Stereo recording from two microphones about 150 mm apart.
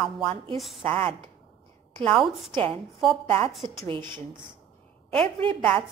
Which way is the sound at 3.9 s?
30° right (ahead or behind).